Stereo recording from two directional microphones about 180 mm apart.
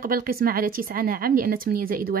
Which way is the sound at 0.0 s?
55° right (ahead or behind).